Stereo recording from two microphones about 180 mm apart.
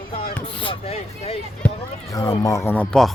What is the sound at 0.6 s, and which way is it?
Speech, 30° left (ahead or behind).